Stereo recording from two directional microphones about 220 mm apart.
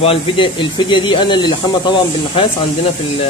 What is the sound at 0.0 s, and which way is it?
Speech, 25° left (ahead or behind).